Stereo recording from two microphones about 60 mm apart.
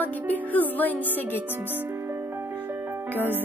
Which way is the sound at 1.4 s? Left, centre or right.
Right.